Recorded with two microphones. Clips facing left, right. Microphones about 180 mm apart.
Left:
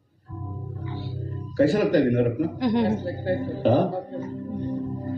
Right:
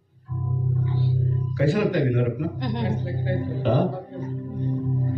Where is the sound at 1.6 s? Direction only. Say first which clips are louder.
Left 3 dB; 40° left (ahead or behind).